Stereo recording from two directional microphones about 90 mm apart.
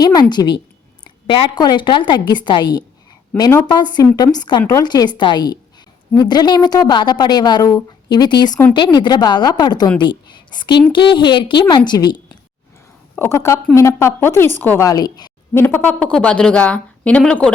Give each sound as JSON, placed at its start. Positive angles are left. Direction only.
{"t": 0.0, "sound": "a woman's voice", "side_deg": 50}
{"t": 11.9, "sound": "a woman's voice", "side_deg": 50}
{"t": 13.1, "sound": "a woman's voice", "side_deg": 30}
{"t": 14.8, "sound": "a woman's voice", "side_deg": 45}
{"t": 15.5, "sound": "a woman's voice", "side_deg": 25}
{"t": 16.0, "sound": "a woman's voice", "side_deg": 10}